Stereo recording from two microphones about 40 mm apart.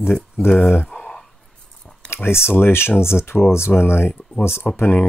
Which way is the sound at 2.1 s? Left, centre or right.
Left.